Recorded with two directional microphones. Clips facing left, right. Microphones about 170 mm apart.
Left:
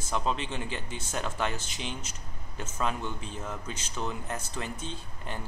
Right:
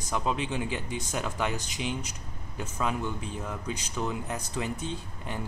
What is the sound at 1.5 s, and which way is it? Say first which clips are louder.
Speech: right 4 dB; 15° right (ahead or behind).